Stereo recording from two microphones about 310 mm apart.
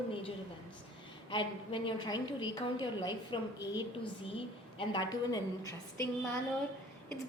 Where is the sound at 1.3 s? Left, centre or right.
Centre.